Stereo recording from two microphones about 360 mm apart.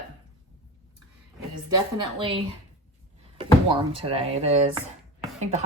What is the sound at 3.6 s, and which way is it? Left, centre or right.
Speech, centre.